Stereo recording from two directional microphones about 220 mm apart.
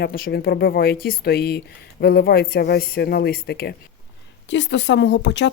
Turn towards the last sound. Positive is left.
turn(degrees=55)  # may be behind; listen again after turning